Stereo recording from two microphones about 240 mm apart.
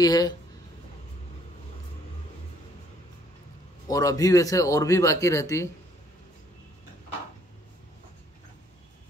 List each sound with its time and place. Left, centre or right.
0.0 s speech: centre
3.8 s speech: centre